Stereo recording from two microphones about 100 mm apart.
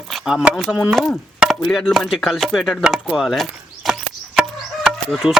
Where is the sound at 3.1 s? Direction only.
Centre (ahead or behind).